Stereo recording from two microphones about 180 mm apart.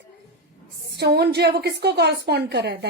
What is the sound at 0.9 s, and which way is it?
A woman's voice, 65° right (ahead or behind).